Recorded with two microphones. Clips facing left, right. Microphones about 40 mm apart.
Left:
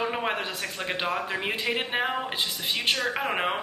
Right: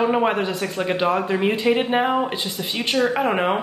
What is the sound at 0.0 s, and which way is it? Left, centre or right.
Speech, centre.